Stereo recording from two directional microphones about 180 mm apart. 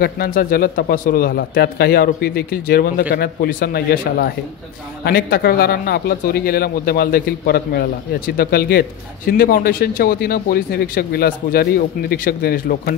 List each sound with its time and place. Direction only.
0.0 s speech: 55° left (ahead or behind)